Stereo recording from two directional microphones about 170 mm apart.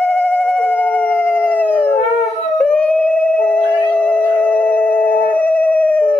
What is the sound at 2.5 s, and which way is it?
Howl, 5° left (ahead or behind).